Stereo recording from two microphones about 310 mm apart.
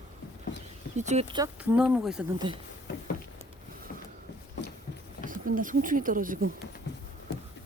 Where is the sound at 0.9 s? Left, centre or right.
Right.